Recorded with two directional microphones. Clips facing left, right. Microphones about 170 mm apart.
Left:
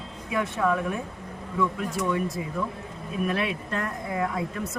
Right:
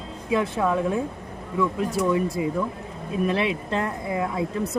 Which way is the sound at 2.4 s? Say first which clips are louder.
Right 5 dB; 20° right (ahead or behind).